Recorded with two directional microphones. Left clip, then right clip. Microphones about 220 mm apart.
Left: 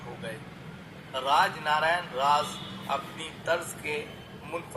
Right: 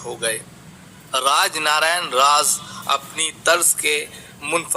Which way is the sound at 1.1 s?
45° right (ahead or behind).